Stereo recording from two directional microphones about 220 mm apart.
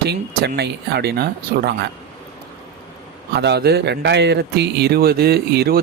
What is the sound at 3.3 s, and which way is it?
Speech, 50° right (ahead or behind).